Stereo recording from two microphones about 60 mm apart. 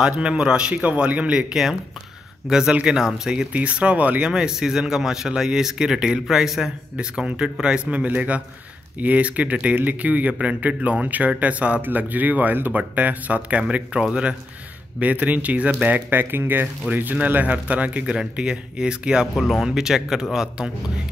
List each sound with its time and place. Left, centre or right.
0.0 s speech: centre
2.7 s speech: centre
15.0 s speech: right
18.1 s speech: centre
19.3 s speech: centre